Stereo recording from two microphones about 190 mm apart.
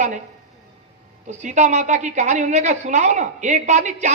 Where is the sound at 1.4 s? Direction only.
40° right (ahead or behind).